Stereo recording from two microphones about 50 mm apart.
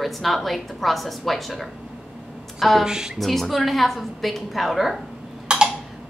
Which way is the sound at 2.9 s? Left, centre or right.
Centre.